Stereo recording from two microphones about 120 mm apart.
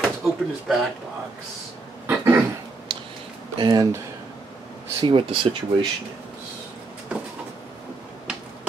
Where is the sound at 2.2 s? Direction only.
20° right (ahead or behind).